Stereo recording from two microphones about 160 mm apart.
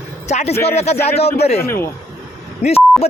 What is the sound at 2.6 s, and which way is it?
Speech, 45° left (ahead or behind).